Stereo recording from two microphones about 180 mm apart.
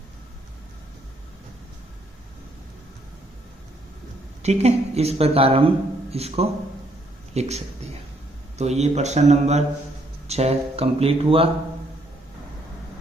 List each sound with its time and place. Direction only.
4.4 s speech: 35° right (ahead or behind)